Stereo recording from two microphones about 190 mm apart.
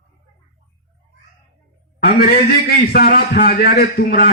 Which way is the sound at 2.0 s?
55° left (ahead or behind).